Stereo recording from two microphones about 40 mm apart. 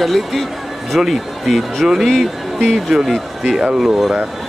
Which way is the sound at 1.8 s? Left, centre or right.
Centre.